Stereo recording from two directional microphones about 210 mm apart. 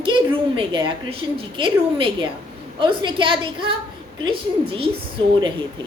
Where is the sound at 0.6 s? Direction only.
25° right (ahead or behind).